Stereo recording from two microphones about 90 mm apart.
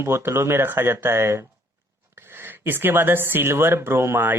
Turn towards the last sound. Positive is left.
turn(degrees=-25)  # may be behind; listen again after turning